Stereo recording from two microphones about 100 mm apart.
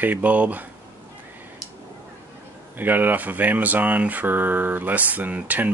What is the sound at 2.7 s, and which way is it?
Speech, 20° right (ahead or behind).